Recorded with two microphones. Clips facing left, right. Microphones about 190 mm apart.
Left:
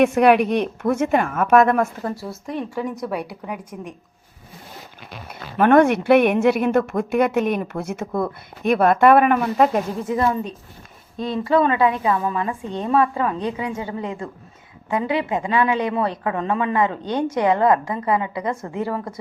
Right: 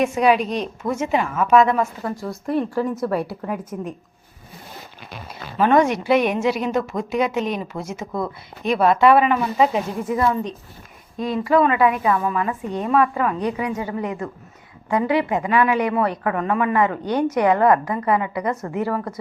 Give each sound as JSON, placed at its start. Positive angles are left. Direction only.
{"t": 0.0, "sound": "speech", "side_deg": 60}
{"t": 2.1, "sound": "speech", "side_deg": 5}
{"t": 5.3, "sound": "speech", "side_deg": 60}
{"t": 10.1, "sound": "a woman's voice", "side_deg": 25}